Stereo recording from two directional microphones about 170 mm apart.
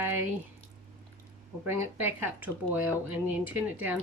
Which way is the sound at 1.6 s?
15° right (ahead or behind).